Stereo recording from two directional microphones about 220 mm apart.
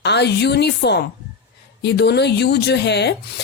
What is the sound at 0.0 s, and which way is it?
Speech, 50° left (ahead or behind).